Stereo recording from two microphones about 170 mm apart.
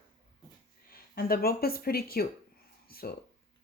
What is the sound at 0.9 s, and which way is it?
A woman's voice, 60° left (ahead or behind).